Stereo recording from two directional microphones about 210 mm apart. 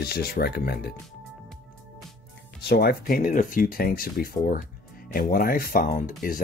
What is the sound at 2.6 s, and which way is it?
Speech, 50° left (ahead or behind).